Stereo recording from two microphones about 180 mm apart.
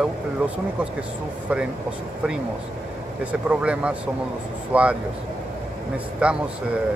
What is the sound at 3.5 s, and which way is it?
Speech, 5° right (ahead or behind).